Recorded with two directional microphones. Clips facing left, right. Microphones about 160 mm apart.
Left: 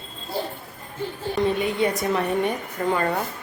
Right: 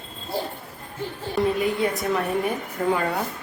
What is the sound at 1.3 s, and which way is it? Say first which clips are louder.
A woman's voice: right 1 dB; centre (ahead or behind).